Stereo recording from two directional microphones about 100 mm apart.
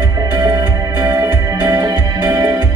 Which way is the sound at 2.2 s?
35° right (ahead or behind).